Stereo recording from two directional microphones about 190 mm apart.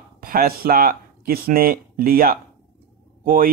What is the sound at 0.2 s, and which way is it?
Speech, 50° right (ahead or behind).